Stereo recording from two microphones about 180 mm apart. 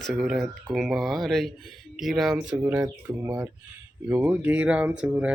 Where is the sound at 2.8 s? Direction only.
20° right (ahead or behind).